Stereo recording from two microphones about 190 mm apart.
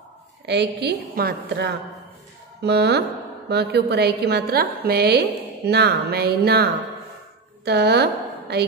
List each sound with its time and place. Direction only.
0.5 s a woman's voice: 65° right (ahead or behind)